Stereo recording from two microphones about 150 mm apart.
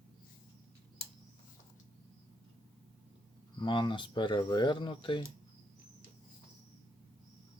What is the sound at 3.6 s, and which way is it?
Speech, 30° left (ahead or behind).